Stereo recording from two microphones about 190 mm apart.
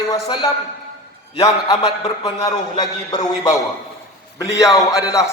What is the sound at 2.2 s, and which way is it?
A man's voice, 20° left (ahead or behind).